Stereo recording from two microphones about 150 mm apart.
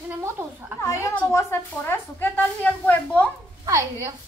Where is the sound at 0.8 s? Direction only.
15° left (ahead or behind).